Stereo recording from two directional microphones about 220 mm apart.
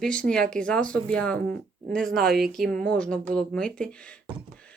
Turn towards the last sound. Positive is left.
turn(degrees=5)  # may be behind; listen again after turning